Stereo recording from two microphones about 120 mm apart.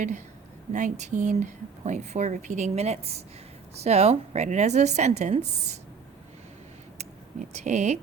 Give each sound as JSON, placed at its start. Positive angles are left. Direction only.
{"t": 0.7, "sound": "a woman's voice", "side_deg": -90}
{"t": 7.5, "sound": "a woman's voice", "side_deg": -75}